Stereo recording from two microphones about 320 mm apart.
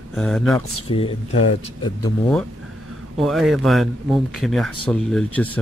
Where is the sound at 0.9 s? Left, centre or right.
Centre.